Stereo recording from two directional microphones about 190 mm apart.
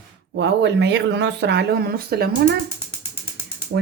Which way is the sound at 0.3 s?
70° right (ahead or behind).